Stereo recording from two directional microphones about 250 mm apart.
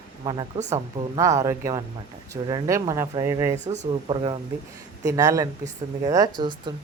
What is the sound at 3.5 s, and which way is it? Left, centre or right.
Speech, right.